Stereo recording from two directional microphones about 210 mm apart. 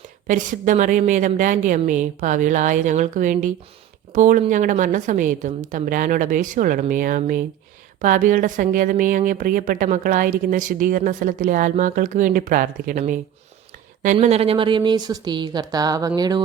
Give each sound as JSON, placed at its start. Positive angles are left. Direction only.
{"t": 0.3, "sound": "a woman's voice", "side_deg": -35}